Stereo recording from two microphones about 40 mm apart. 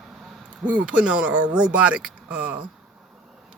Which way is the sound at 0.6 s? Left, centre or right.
Right.